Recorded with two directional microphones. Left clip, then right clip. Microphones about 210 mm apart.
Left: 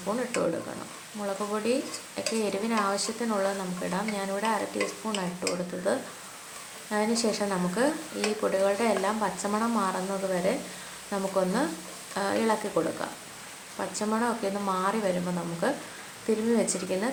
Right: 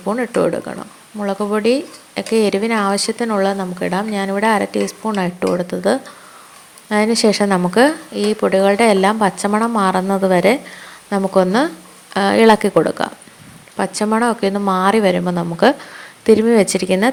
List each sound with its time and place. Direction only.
1.2 s speech: 35° right (ahead or behind)